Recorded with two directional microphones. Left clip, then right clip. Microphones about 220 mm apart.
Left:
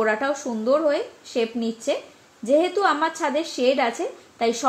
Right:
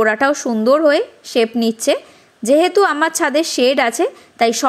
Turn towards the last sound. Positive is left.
turn(degrees=-40)  # may be behind; listen again after turning